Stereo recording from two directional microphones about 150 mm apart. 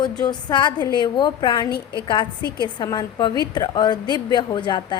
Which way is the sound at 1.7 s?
90° left.